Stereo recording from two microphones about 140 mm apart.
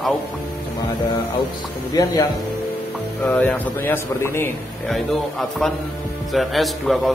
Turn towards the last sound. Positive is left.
turn(degrees=0)  # may be behind; listen again after turning